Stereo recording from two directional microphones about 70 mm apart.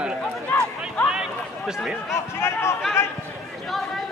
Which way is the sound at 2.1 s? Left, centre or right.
Left.